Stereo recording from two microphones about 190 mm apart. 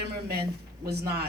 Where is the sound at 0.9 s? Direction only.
60° right (ahead or behind).